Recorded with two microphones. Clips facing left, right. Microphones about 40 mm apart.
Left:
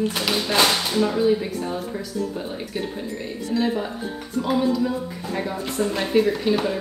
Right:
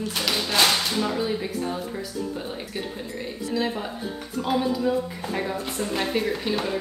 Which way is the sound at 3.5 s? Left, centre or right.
Centre.